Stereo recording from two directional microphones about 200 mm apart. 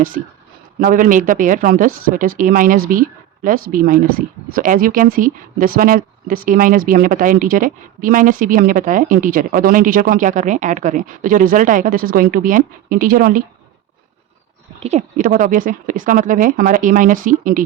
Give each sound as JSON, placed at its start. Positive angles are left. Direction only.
{"t": 0.2, "sound": "speech", "side_deg": -45}
{"t": 14.8, "sound": "speech", "side_deg": -35}